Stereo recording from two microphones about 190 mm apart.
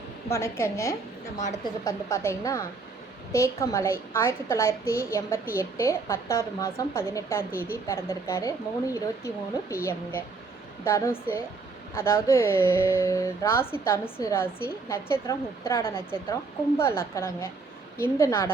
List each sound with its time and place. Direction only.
0.3 s a woman's voice: 15° left (ahead or behind)